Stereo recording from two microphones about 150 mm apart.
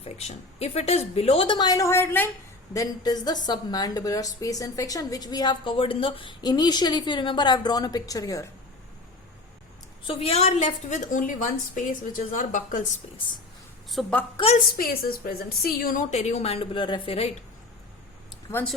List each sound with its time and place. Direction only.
0.0 s a woman's voice: 45° left (ahead or behind); by 8.4 s 20° left (ahead or behind)
10.1 s a woman's voice: 40° left (ahead or behind); by 12.8 s 60° left (ahead or behind)
13.9 s a woman's voice: 10° left (ahead or behind)
14.3 s a woman's voice: 40° left (ahead or behind)
14.8 s a woman's voice: 75° left (ahead or behind); by 17.2 s 35° left (ahead or behind)